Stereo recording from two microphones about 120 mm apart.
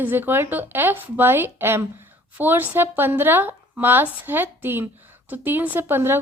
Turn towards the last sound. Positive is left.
turn(degrees=-20)  # may be behind; listen again after turning